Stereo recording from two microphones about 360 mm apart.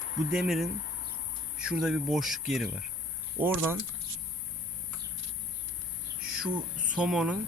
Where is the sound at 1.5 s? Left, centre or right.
Centre.